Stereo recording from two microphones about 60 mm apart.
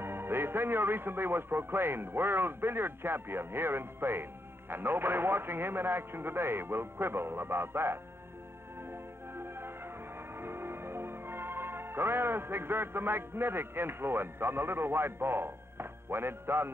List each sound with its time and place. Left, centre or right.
0.0 s a man's voice: right
8.9 s music: right